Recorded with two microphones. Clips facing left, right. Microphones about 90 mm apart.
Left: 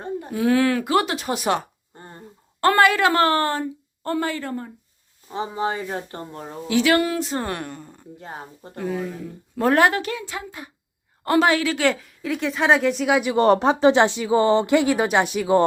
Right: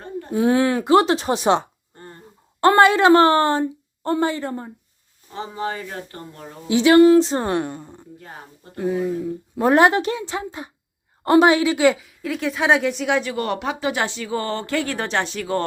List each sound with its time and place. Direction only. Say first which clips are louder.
0.3 s a woman's voice: right 2 dB; 25° right (ahead or behind)
2.0 s a sound: right 1 dB; 20° left (ahead or behind)
2.6 s a woman's voice: right 3 dB; 20° right (ahead or behind)
5.3 s speech: left 2 dB; 20° left (ahead or behind)
6.7 s a woman's voice: right 7 dB; 20° right (ahead or behind)
8.2 s speech: left 9 dB; 25° left (ahead or behind)
8.8 s a woman's voice: right 5 dB; 15° right (ahead or behind); by 13.2 s centre (ahead or behind)
13.3 s speech: left 8 dB; 30° left (ahead or behind); by 15.6 s 15° left (ahead or behind)